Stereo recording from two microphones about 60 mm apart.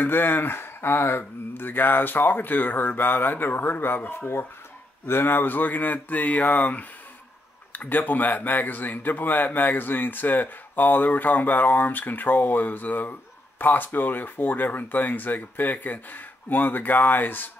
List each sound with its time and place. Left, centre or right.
0.0 s a man's voice: left